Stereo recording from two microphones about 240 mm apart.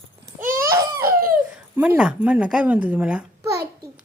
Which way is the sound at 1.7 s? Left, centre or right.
Centre.